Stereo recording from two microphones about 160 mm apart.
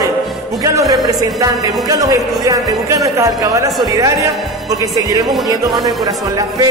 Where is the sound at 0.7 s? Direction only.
20° right (ahead or behind).